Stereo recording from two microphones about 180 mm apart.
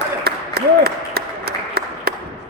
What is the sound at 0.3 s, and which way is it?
Applause, 60° right (ahead or behind).